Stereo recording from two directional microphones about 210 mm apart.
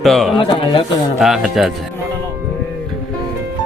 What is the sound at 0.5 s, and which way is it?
Speech, 25° left (ahead or behind).